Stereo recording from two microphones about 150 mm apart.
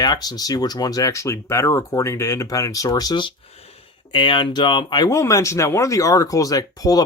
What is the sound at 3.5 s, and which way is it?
Speech, 45° left (ahead or behind).